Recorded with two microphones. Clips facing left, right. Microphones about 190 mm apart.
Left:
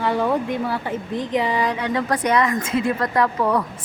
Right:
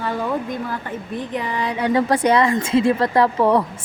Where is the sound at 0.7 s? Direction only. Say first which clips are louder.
Left 3 dB; 15° left (ahead or behind).